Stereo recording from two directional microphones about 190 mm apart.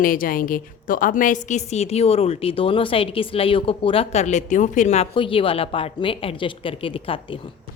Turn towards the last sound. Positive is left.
turn(degrees=25)  # may be behind; listen again after turning